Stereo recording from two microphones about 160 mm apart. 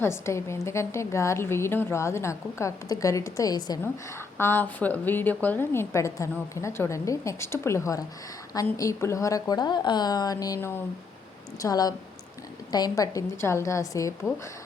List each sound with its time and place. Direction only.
0.0 s a woman's voice: 15° left (ahead or behind)